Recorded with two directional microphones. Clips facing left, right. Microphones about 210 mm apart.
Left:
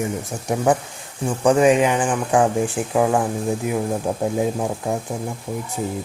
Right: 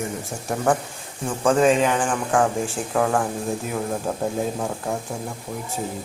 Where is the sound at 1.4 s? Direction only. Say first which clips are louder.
Left 3 dB; 15° left (ahead or behind).